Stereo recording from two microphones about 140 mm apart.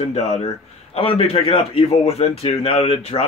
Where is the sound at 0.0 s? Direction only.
55° left (ahead or behind).